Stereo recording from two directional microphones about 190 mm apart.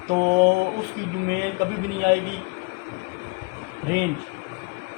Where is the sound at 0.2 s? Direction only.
60° right (ahead or behind).